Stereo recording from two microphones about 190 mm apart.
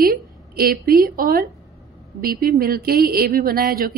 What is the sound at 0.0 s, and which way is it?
A woman's voice, 50° right (ahead or behind).